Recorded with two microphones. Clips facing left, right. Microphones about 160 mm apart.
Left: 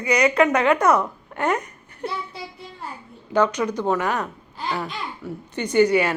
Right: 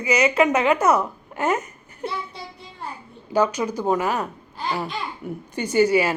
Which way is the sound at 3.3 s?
10° right (ahead or behind).